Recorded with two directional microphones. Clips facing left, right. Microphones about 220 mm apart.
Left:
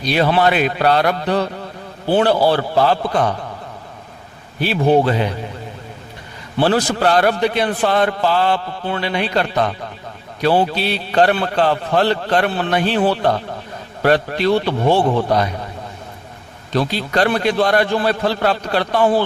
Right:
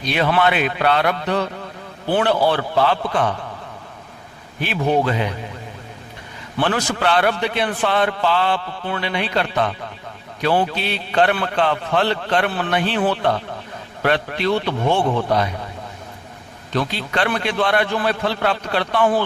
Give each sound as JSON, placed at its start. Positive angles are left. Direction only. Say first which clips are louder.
{"t": 0.0, "sound": "a man's voice", "louder": "left 3 dB", "side_deg": 35}
{"t": 4.6, "sound": "a man's voice", "louder": "left 5 dB", "side_deg": 35}
{"t": 6.6, "sound": "a man's voice", "louder": "left 5 dB", "side_deg": 35}
{"t": 12.5, "sound": "speech", "louder": "left 3 dB", "side_deg": 25}
{"t": 12.7, "sound": "a man's voice", "louder": "left 3 dB", "side_deg": 40}
{"t": 16.7, "sound": "a man's voice", "louder": "left 4 dB", "side_deg": 40}